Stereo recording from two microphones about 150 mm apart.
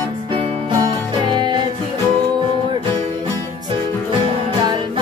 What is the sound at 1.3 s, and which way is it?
Music, 30° right (ahead or behind).